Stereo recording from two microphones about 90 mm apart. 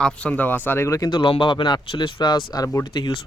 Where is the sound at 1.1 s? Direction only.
65° left (ahead or behind).